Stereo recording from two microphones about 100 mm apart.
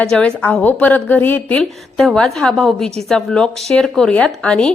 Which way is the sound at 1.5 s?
5° left (ahead or behind).